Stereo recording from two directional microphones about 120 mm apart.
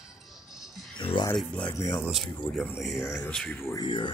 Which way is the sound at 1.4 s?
10° left (ahead or behind).